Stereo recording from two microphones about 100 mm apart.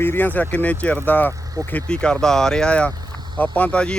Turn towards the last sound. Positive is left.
turn(degrees=10)  # may be behind; listen again after turning